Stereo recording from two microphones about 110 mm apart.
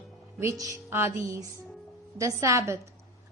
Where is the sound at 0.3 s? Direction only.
30° right (ahead or behind).